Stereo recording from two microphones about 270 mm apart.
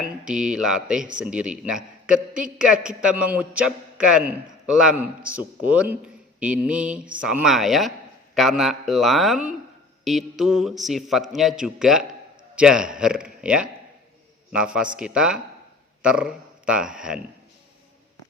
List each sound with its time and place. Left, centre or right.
0.0 s a man's voice: centre